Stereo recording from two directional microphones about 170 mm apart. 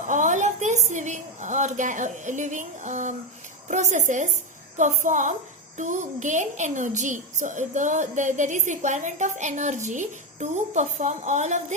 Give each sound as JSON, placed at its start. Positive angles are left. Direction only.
{"t": 0.1, "sound": "a woman's voice", "side_deg": -45}